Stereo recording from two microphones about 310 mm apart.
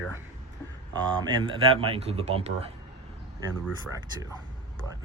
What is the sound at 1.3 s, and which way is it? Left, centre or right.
Speech, centre.